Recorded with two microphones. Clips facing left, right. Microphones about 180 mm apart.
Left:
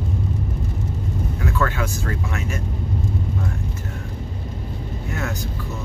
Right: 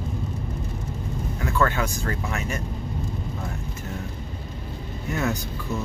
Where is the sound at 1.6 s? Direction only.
Centre (ahead or behind).